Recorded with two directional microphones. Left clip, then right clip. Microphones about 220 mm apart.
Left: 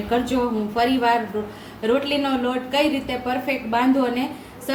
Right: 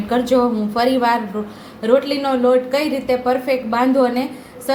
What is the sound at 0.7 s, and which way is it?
Speech, 30° right (ahead or behind).